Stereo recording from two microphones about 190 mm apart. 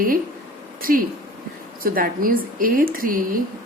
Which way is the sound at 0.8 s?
50° right (ahead or behind).